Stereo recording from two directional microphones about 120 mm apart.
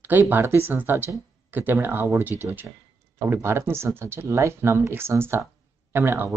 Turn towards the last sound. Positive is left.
turn(degrees=-20)  # may be behind; listen again after turning